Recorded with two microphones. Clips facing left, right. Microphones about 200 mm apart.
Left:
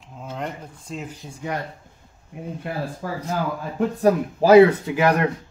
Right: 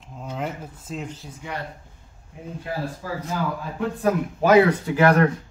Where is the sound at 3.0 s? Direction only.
55° left (ahead or behind).